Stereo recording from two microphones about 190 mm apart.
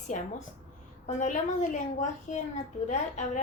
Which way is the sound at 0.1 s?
45° left (ahead or behind).